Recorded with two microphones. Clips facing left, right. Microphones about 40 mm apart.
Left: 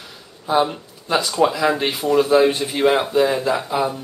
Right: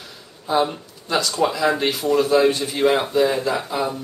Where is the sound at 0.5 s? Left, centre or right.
Centre.